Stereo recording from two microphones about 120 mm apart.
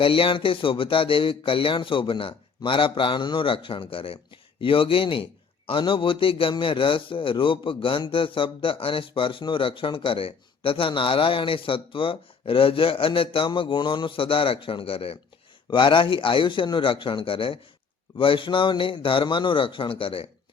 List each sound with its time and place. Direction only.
0.0 s a man's voice: 50° left (ahead or behind)